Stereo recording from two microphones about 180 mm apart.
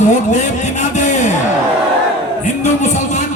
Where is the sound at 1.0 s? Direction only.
45° left (ahead or behind).